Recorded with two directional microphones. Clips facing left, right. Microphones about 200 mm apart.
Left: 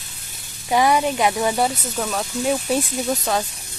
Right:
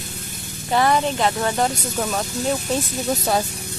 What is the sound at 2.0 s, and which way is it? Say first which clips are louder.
Speech: right 1 dB; 5° right (ahead or behind).